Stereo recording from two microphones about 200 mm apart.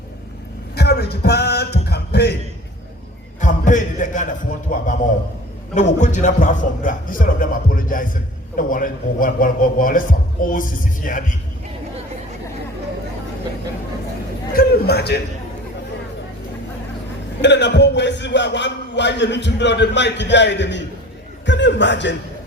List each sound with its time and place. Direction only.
0.8 s a man's voice: 55° left (ahead or behind)
3.4 s music: 40° left (ahead or behind)
5.7 s a man's voice: 35° left (ahead or behind)
14.5 s a man's voice: 50° left (ahead or behind)
17.4 s a man's voice: 60° left (ahead or behind)